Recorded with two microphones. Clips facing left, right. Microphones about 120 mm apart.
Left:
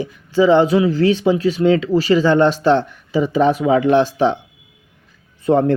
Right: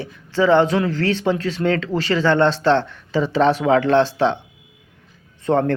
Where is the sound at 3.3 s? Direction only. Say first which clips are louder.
Left 1 dB; 75° right (ahead or behind).